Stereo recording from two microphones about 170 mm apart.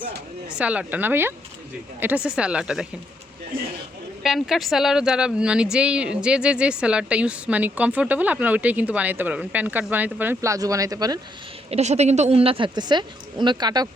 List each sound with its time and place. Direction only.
0.4 s speech: 10° right (ahead or behind)
4.2 s speech: centre (ahead or behind); by 11.2 s 20° right (ahead or behind)
11.7 s speech: 40° right (ahead or behind); by 13.8 s 25° right (ahead or behind)